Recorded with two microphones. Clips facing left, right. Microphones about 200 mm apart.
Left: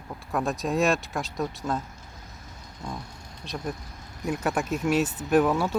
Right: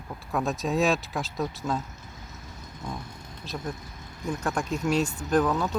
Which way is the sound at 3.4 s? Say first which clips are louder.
Left 1 dB; centre (ahead or behind).